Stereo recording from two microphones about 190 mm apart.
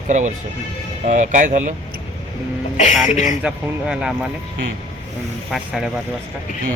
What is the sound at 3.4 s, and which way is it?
Speech, 5° right (ahead or behind).